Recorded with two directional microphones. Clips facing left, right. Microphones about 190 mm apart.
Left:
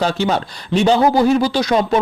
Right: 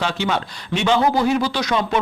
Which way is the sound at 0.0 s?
40° left (ahead or behind).